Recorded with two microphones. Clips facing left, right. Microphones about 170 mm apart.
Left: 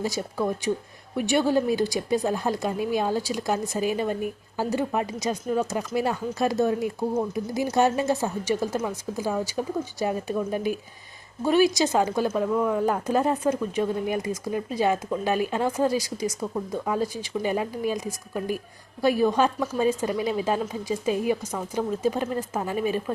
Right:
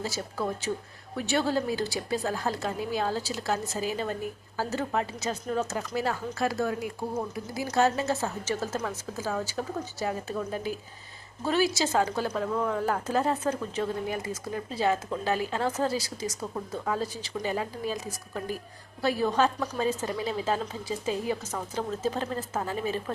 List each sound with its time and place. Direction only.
0.0 s speech: 15° left (ahead or behind)